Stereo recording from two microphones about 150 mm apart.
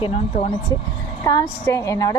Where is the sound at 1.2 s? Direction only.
25° left (ahead or behind).